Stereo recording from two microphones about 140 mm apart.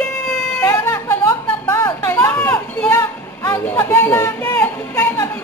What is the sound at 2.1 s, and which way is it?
Chatter, 15° left (ahead or behind).